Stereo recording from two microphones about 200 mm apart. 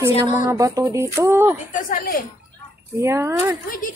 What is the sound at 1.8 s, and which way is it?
Speech, 45° left (ahead or behind).